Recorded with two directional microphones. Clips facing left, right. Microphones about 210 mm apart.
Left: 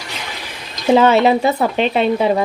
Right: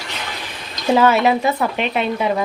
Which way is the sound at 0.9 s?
25° left (ahead or behind).